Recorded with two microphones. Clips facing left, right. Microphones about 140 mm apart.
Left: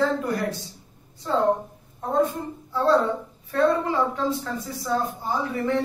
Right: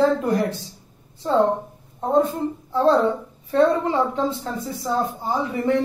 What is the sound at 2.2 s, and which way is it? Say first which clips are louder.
A woman's voice: right 1 dB; 25° right (ahead or behind).